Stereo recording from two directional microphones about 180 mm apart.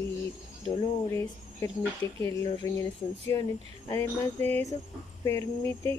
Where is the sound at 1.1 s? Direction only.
15° left (ahead or behind).